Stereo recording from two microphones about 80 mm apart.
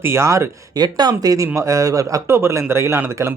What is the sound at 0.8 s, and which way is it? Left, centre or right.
Speech, right.